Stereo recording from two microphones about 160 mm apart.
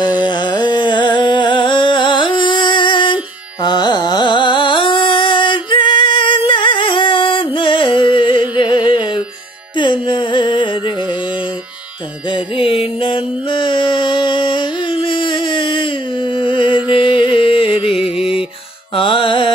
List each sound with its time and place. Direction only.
0.0 s music: 30° left (ahead or behind)
3.6 s carnatic music: 25° left (ahead or behind)
9.8 s music: 30° left (ahead or behind)
12.3 s music: 30° left (ahead or behind)
17.9 s music: centre (ahead or behind)
18.9 s music: 35° left (ahead or behind)